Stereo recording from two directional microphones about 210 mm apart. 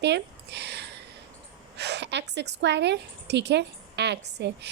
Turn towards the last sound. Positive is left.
turn(degrees=-55)  # may be behind; listen again after turning